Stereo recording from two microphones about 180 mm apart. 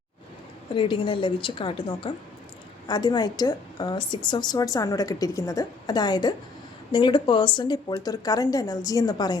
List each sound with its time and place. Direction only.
0.7 s a woman's voice: 25° left (ahead or behind)